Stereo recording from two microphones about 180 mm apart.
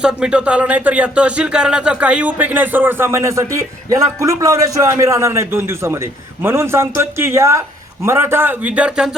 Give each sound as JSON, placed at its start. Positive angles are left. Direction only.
{"t": 0.0, "sound": "speech", "side_deg": -5}